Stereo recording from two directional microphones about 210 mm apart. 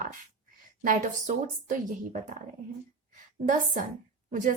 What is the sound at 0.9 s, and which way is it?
Speech, 40° right (ahead or behind).